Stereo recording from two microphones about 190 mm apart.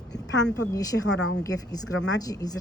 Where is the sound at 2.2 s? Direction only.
20° left (ahead or behind).